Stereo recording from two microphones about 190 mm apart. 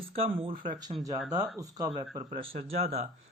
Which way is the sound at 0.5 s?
45° right (ahead or behind).